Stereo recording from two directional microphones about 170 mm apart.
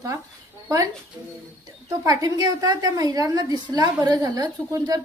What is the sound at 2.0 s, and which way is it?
A woman's voice, 20° right (ahead or behind).